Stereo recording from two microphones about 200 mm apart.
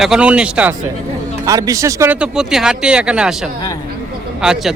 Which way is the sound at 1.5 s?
15° right (ahead or behind).